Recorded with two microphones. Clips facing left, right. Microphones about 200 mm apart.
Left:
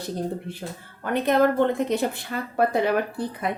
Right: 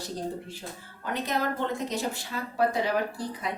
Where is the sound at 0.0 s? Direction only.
60° left (ahead or behind).